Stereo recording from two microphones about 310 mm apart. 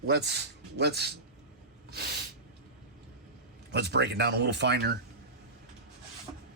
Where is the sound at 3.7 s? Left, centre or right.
Right.